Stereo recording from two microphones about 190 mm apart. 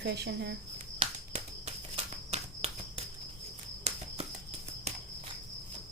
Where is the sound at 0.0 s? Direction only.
60° right (ahead or behind).